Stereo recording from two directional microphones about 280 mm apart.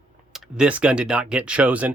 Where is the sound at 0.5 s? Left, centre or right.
Centre.